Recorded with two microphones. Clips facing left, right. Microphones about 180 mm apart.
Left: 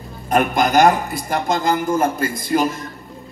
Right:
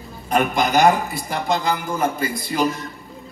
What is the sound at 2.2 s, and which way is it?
Speech, 50° left (ahead or behind).